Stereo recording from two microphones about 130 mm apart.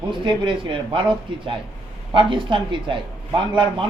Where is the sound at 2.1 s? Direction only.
40° right (ahead or behind).